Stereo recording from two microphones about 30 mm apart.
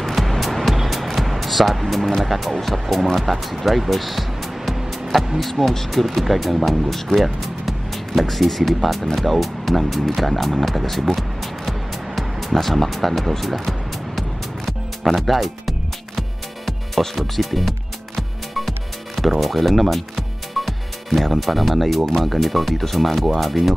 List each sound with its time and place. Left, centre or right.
0.0 s music: centre
2.2 s speech: centre
10.9 s music: centre
12.5 s speech: centre
14.7 s music: centre
19.4 s speech: centre